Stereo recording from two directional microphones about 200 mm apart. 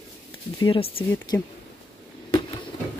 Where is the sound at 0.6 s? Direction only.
25° left (ahead or behind).